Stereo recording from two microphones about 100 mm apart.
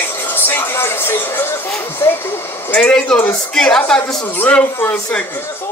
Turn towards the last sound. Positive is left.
turn(degrees=10)  # may be behind; listen again after turning